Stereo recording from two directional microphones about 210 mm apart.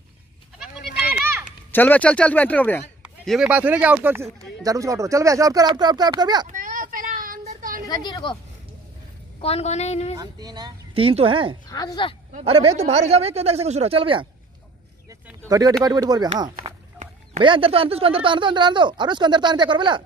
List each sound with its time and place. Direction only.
1.4 s speech: 10° left (ahead or behind)
3.0 s speech: 5° right (ahead or behind); by 6.4 s 20° right (ahead or behind)
6.4 s child singing: 40° right (ahead or behind)
7.9 s a woman's voice: 20° left (ahead or behind)
9.4 s a woman's voice: 30° left (ahead or behind)
10.1 s speech: 20° right (ahead or behind)
11.7 s a woman's voice: 20° left (ahead or behind)
12.4 s speech: 25° right (ahead or behind)
15.2 s a sound: 15° right (ahead or behind)
15.8 s speech: 20° right (ahead or behind)
17.4 s speech: 25° right (ahead or behind)